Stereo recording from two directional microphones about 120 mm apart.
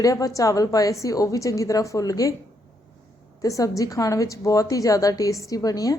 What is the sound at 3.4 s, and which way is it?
A woman's voice, 30° left (ahead or behind).